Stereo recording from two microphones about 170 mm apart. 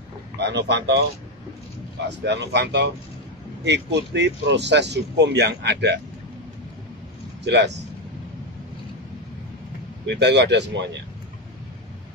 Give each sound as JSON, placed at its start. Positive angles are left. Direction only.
{"t": 0.4, "sound": "speech", "side_deg": -90}
{"t": 2.0, "sound": "speech", "side_deg": -90}
{"t": 7.4, "sound": "speech", "side_deg": -90}
{"t": 10.0, "sound": "speech", "side_deg": -90}